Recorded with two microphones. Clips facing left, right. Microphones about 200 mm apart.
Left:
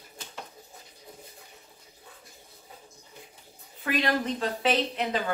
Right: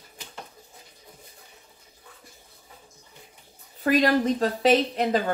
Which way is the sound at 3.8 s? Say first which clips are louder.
Right 7 dB; 40° right (ahead or behind).